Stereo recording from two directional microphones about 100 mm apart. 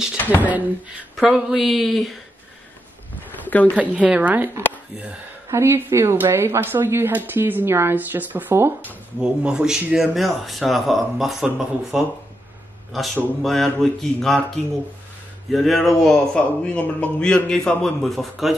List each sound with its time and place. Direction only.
0.4 s speech: 15° right (ahead or behind)
1.1 s speech: 5° right (ahead or behind)
3.4 s a woman's voice: 15° left (ahead or behind)
3.7 s a woman's voice: 15° right (ahead or behind)
9.2 s speech: 10° right (ahead or behind)